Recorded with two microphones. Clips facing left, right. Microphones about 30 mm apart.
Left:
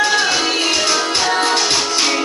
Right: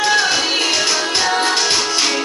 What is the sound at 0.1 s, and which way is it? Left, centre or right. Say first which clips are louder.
Music: even; centre.